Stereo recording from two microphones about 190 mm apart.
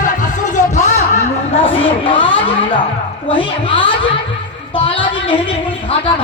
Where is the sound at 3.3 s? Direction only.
25° left (ahead or behind).